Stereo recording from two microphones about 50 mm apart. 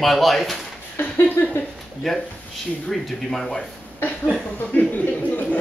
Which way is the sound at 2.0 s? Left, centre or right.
Centre.